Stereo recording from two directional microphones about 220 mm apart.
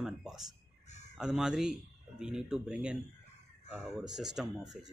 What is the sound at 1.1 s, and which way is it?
Speech, 5° right (ahead or behind).